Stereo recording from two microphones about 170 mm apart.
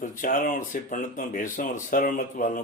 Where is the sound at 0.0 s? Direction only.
50° left (ahead or behind).